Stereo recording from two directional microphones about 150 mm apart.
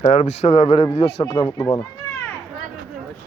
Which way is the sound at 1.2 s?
20° left (ahead or behind).